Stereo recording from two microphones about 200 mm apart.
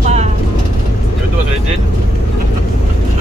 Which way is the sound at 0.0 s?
35° right (ahead or behind).